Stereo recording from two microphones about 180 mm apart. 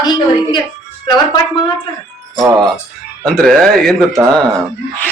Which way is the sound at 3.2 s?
5° left (ahead or behind).